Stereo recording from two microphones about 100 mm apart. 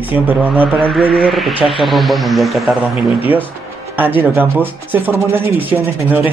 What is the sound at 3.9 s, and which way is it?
Speech, 20° right (ahead or behind).